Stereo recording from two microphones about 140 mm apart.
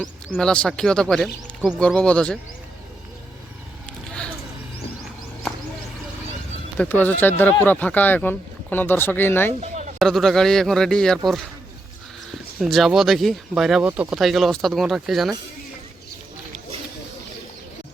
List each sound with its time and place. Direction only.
0.3 s speech: 5° left (ahead or behind)
6.7 s speech: 10° left (ahead or behind)
9.6 s a sound: 55° right (ahead or behind)
10.0 s speech: 5° left (ahead or behind)
12.5 s speech: centre (ahead or behind)